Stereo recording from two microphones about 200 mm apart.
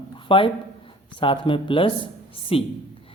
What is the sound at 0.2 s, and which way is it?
Speech, 25° left (ahead or behind).